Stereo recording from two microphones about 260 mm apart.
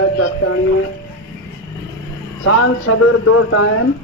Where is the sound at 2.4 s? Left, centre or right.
Left.